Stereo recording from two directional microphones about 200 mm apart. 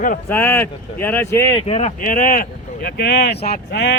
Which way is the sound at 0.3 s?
10° left (ahead or behind).